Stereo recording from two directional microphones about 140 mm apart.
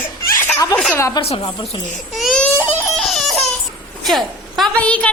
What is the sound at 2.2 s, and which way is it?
Speech, 10° left (ahead or behind).